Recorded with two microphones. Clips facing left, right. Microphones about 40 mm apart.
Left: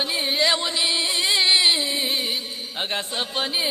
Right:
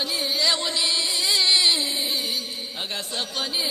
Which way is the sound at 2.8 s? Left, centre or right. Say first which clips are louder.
Left 4 dB; left.